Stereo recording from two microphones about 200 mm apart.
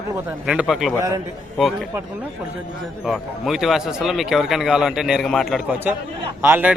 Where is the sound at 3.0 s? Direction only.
Centre (ahead or behind).